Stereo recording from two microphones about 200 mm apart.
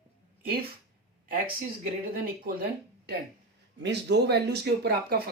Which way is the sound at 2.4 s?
50° right (ahead or behind).